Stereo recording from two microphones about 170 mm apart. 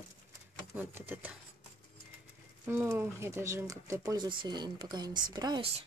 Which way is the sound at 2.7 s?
15° right (ahead or behind).